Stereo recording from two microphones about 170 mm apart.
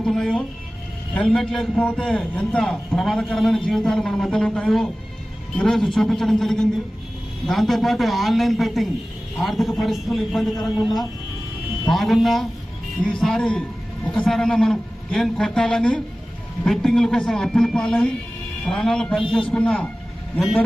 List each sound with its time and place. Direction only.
0.0 s a man's voice: 5° left (ahead or behind)
11.9 s a man's voice: centre (ahead or behind)